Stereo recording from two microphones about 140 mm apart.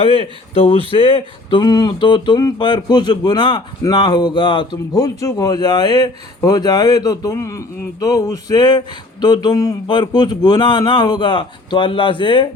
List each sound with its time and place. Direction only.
0.0 s speech: 40° left (ahead or behind)
0.9 s a sound: 40° left (ahead or behind)
9.2 s speech: 30° left (ahead or behind)